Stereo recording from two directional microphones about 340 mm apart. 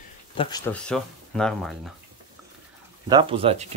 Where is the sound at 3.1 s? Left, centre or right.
Centre.